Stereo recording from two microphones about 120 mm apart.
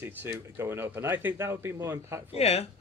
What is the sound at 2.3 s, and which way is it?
Speech, 60° left (ahead or behind).